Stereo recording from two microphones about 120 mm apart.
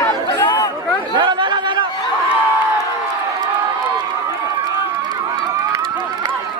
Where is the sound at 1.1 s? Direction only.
40° right (ahead or behind).